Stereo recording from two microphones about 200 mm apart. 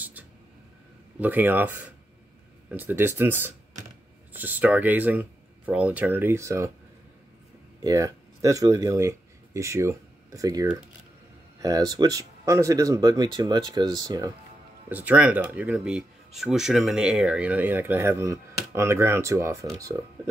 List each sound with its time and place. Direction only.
1.2 s speech: 10° right (ahead or behind)
7.8 s speech: 15° right (ahead or behind)
14.9 s speech: 10° right (ahead or behind)